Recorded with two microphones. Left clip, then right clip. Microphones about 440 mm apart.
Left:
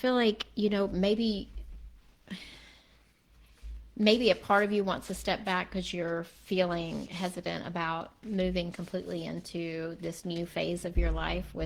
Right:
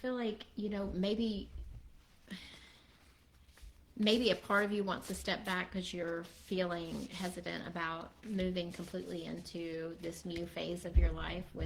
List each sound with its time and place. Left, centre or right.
0.0 s speech: left
4.0 s a woman's voice: left